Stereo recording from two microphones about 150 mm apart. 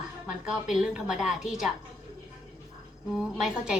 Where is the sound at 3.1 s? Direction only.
5° right (ahead or behind).